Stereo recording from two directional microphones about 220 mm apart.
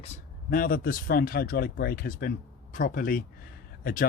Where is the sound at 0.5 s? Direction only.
40° left (ahead or behind).